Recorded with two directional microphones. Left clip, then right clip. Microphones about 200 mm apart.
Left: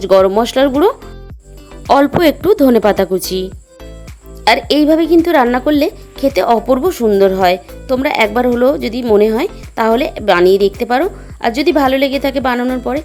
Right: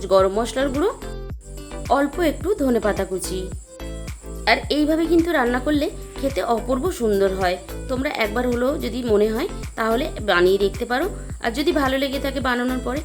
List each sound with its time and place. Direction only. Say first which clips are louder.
0.0 s speech: left 8 dB; 40° left (ahead or behind)
1.9 s speech: left 10 dB; 50° left (ahead or behind)
4.4 s speech: left 9 dB; 45° left (ahead or behind)